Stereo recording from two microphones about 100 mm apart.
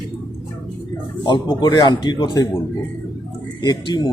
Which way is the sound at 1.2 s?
50° left (ahead or behind).